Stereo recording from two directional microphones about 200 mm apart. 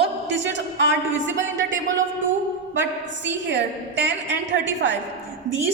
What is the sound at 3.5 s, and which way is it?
A woman's voice, 65° right (ahead or behind).